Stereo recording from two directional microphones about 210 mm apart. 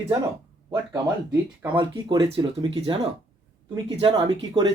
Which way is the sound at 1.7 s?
20° right (ahead or behind).